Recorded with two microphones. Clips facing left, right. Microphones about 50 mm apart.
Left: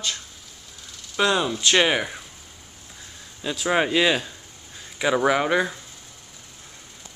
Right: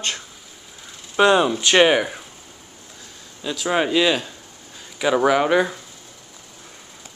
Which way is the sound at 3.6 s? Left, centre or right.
Centre.